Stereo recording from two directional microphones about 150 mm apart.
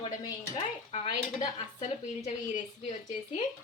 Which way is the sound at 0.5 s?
40° left (ahead or behind).